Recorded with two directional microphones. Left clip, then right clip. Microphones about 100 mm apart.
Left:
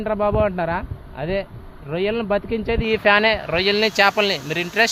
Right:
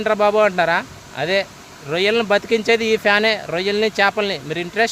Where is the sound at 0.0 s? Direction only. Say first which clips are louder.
Right 5 dB; 45° right (ahead or behind).